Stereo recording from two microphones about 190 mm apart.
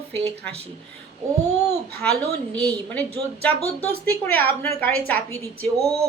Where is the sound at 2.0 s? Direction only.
5° left (ahead or behind).